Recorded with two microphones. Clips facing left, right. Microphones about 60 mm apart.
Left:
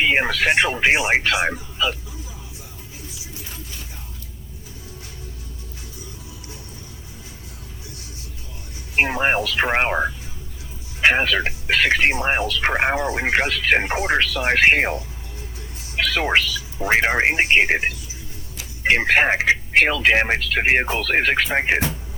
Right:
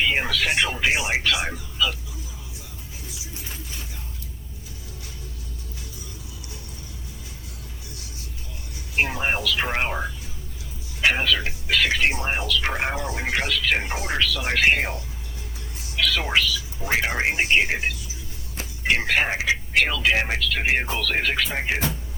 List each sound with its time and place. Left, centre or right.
0.0 s speech: left
9.0 s speech: left